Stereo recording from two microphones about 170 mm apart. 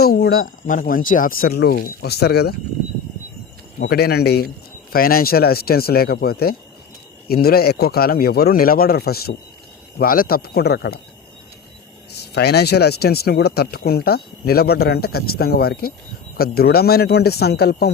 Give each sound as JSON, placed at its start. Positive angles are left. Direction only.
{"t": 0.0, "sound": "speech", "side_deg": 65}
{"t": 3.8, "sound": "speech", "side_deg": 70}
{"t": 12.1, "sound": "speech", "side_deg": 75}